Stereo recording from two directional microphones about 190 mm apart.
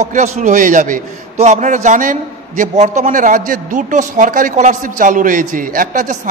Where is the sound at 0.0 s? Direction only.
40° right (ahead or behind).